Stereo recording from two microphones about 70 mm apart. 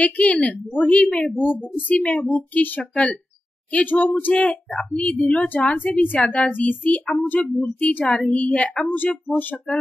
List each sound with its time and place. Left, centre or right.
0.0 s a woman's voice: centre
8.0 s speech: centre